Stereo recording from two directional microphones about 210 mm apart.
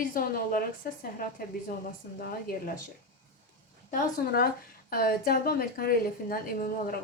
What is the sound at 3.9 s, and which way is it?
A woman's voice, 45° left (ahead or behind).